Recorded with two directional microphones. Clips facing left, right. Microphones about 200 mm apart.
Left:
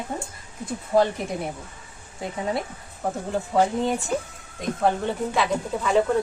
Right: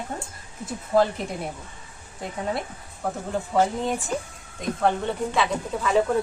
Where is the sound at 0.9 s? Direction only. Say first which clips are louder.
Even; centre (ahead or behind).